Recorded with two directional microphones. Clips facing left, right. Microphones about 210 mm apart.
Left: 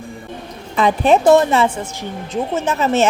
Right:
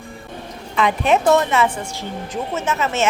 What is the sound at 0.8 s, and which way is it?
Speech, 35° left (ahead or behind).